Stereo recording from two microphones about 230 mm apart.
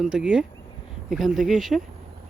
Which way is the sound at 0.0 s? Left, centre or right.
Centre.